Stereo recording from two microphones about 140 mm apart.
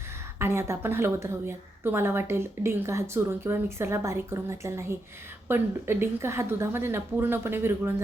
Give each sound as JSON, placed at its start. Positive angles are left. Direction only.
{"t": 0.3, "sound": "a woman's voice", "side_deg": -20}